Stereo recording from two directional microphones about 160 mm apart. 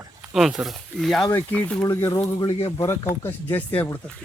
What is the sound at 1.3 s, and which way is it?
Speech, 15° left (ahead or behind).